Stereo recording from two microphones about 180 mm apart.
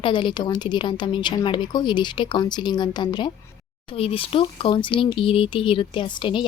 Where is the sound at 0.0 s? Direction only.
25° left (ahead or behind).